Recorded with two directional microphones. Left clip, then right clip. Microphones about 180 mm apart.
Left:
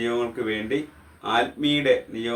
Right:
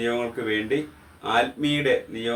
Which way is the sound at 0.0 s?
10° left (ahead or behind).